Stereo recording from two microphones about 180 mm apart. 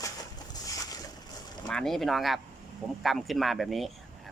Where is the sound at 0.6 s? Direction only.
20° left (ahead or behind).